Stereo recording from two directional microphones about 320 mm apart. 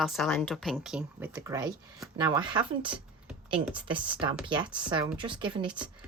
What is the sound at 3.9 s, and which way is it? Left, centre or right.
Speech, centre.